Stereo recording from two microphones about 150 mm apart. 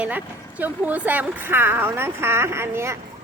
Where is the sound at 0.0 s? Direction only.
10° right (ahead or behind).